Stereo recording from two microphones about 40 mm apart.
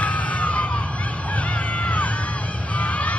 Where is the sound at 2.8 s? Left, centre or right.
Left.